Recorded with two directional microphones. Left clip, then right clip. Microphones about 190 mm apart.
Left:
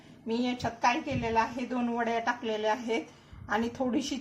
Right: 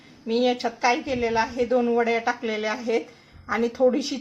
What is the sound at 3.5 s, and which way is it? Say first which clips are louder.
Dishes: right 9 dB; 25° right (ahead or behind).